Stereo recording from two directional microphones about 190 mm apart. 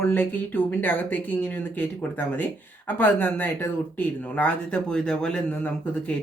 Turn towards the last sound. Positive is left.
turn(degrees=5)  # may be behind; listen again after turning